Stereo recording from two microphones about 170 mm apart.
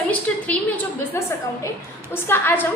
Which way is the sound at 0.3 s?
5° left (ahead or behind).